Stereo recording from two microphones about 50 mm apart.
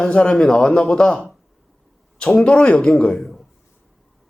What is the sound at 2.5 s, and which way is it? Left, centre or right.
Speech, left.